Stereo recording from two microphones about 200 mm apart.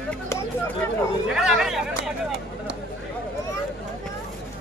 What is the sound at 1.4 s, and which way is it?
Speech, 5° right (ahead or behind).